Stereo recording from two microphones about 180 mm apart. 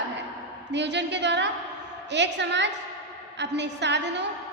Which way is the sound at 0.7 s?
75° right (ahead or behind).